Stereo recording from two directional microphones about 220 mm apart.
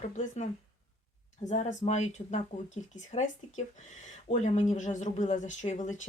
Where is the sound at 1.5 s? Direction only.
30° left (ahead or behind).